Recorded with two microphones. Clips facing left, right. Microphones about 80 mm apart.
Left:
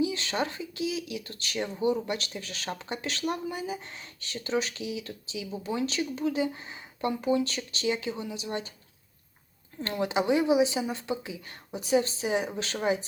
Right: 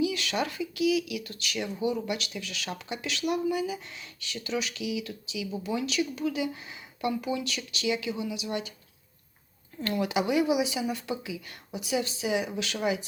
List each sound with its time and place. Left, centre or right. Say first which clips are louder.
0.0 s speech: even; left
9.8 s speech: even; left